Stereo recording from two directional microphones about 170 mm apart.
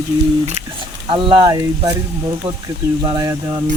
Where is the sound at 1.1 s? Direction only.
30° right (ahead or behind).